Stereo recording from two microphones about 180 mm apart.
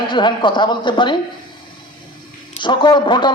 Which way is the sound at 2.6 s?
25° left (ahead or behind).